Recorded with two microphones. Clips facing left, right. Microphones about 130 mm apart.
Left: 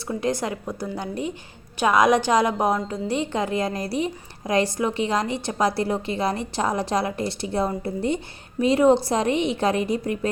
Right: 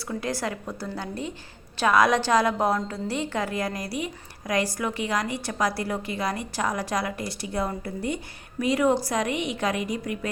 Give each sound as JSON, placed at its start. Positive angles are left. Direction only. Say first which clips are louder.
{"t": 0.2, "sound": "a woman's voice", "louder": "left 5 dB", "side_deg": 20}